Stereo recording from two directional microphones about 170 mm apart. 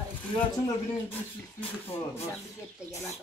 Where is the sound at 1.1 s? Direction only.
10° left (ahead or behind).